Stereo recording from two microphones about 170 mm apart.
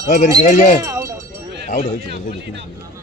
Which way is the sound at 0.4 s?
50° left (ahead or behind).